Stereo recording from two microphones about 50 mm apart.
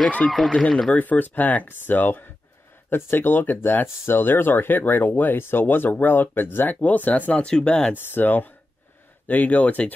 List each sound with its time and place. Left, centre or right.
0.2 s speech: left
0.6 s speech: centre
0.9 s speech: left
7.4 s speech: centre
7.9 s speech: left